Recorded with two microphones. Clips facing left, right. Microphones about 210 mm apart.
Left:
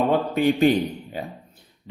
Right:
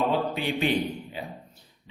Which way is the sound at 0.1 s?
45° left (ahead or behind).